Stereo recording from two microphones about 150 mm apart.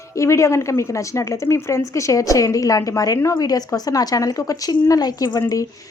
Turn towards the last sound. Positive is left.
turn(degrees=20)  # may be behind; listen again after turning